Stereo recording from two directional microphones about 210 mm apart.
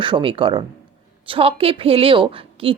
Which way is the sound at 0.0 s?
25° right (ahead or behind).